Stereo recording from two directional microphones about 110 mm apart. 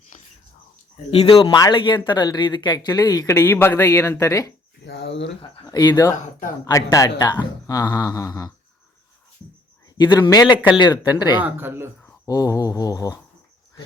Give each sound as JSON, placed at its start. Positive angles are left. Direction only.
{"t": 1.3, "sound": "speech", "side_deg": 45}
{"t": 3.4, "sound": "speech", "side_deg": 20}
{"t": 5.6, "sound": "speech", "side_deg": 40}
{"t": 10.0, "sound": "speech", "side_deg": 40}
{"t": 11.3, "sound": "speech", "side_deg": -20}
{"t": 12.2, "sound": "speech", "side_deg": 30}